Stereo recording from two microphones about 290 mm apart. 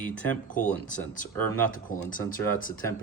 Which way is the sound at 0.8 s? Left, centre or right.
Left.